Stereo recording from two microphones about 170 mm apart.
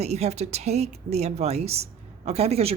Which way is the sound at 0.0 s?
40° right (ahead or behind).